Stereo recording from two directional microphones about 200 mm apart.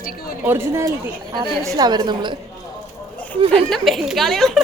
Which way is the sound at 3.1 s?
5° left (ahead or behind).